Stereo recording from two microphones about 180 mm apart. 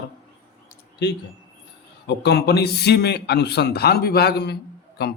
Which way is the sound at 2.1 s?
65° left (ahead or behind).